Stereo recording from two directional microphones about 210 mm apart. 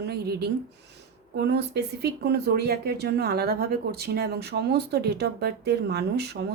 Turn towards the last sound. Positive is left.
turn(degrees=-50)  # may be behind; listen again after turning